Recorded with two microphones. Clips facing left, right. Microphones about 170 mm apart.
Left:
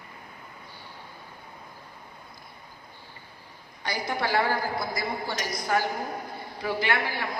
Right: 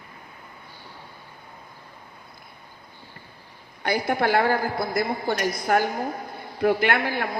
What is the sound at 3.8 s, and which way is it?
A man's voice, 55° right (ahead or behind).